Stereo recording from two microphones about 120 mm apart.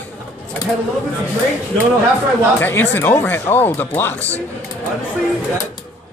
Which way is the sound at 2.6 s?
15° left (ahead or behind).